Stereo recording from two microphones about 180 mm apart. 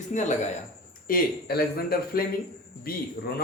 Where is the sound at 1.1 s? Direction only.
60° left (ahead or behind).